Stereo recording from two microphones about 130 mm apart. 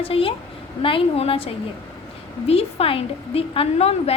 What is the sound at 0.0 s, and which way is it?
A woman's voice, 45° left (ahead or behind).